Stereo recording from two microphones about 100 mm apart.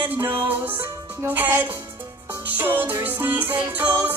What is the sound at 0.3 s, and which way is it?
Music, 15° right (ahead or behind).